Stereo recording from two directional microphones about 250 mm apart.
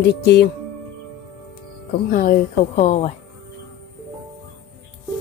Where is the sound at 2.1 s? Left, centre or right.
Left.